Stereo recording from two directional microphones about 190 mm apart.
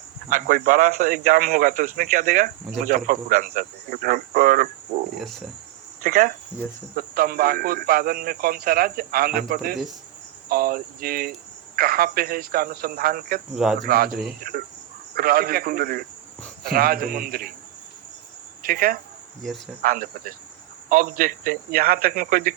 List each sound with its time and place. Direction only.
0.3 s speech: 45° right (ahead or behind)
5.1 s cricket: centre (ahead or behind)
6.0 s cricket: 50° right (ahead or behind)
6.9 s speech: 50° right (ahead or behind)
15.1 s speech: 50° right (ahead or behind)
18.6 s speech: 50° right (ahead or behind)
19.4 s cricket: centre (ahead or behind)
19.8 s speech: 50° right (ahead or behind)